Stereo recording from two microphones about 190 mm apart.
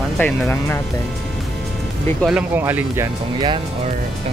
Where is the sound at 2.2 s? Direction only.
10° right (ahead or behind).